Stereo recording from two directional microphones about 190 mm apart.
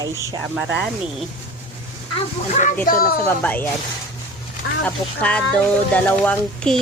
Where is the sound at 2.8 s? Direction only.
50° left (ahead or behind).